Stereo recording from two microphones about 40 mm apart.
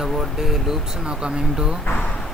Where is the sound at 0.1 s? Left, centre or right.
Centre.